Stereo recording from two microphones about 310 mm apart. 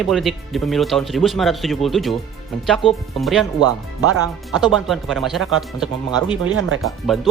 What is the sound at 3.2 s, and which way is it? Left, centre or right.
Speech, centre.